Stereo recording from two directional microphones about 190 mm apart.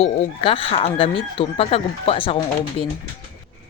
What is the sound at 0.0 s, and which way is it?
Speech, 30° left (ahead or behind).